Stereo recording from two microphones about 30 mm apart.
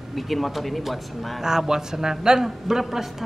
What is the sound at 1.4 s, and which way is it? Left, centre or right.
Speech, centre.